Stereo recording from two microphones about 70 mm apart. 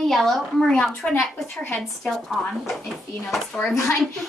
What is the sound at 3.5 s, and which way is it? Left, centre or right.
Speech, left.